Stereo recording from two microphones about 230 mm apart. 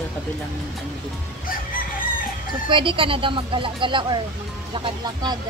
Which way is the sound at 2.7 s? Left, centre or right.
Right.